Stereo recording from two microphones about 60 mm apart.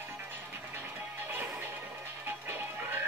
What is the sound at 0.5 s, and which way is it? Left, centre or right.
Music, right.